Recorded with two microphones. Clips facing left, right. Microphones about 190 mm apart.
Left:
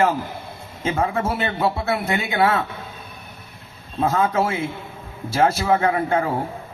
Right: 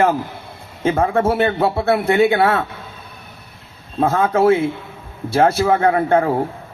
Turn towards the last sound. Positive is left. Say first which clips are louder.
# right 5 dB
turn(degrees=-50)  # may be behind; listen again after turning